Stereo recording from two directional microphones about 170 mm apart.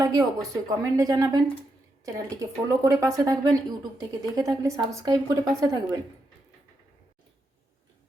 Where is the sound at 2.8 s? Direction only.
20° right (ahead or behind).